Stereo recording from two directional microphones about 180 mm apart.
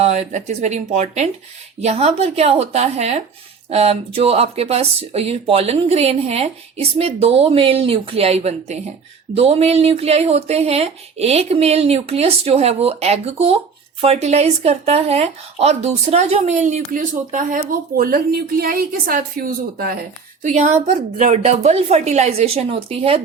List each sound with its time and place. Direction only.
0.0 s speech: 40° right (ahead or behind)
20.4 s speech: 40° right (ahead or behind)